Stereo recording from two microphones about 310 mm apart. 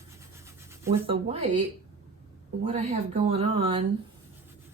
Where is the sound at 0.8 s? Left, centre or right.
Centre.